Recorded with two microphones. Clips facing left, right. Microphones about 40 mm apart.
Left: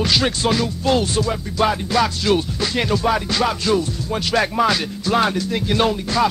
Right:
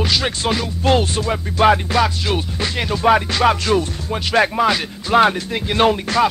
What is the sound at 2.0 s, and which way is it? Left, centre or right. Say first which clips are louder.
Music: left 1 dB; centre.